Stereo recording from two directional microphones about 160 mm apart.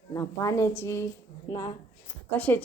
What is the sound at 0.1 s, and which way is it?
A woman's voice, 20° left (ahead or behind).